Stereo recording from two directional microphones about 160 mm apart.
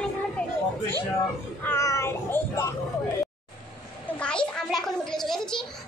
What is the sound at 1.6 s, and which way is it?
Child singing, 20° left (ahead or behind).